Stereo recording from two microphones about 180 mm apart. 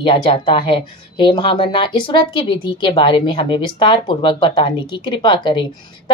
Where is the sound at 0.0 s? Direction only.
30° left (ahead or behind).